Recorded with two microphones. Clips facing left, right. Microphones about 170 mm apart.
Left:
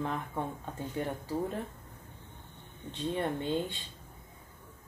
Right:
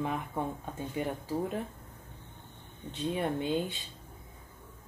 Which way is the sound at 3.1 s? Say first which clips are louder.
Right 1 dB; 5° right (ahead or behind).